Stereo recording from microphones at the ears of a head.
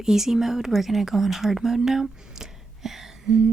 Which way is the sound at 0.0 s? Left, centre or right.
Centre.